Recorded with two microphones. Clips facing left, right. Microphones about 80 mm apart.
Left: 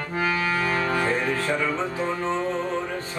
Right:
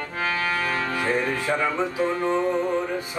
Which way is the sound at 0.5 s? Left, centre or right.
Left.